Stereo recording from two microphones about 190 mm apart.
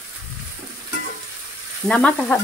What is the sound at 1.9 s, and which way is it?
Speech, 5° left (ahead or behind).